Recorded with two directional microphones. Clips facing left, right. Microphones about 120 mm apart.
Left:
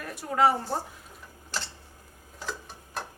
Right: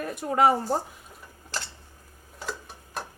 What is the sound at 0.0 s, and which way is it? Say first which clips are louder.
Speech: right 2 dB; 20° right (ahead or behind).